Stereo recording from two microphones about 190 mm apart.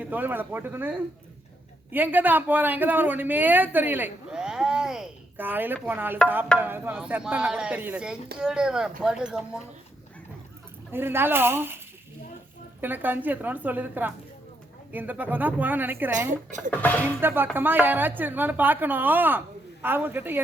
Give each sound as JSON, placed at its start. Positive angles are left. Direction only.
{"t": 0.0, "sound": "a woman's voice", "side_deg": -10}
{"t": 10.9, "sound": "a woman's voice", "side_deg": -10}
{"t": 12.8, "sound": "a woman's voice", "side_deg": -10}
{"t": 16.7, "sound": "speech", "side_deg": 10}
{"t": 17.2, "sound": "a woman's voice", "side_deg": -10}